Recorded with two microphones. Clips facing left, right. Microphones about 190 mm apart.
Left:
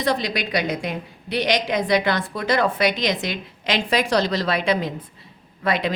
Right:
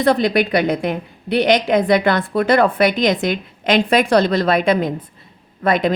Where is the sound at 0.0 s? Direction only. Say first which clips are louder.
Right 8 dB; 55° right (ahead or behind).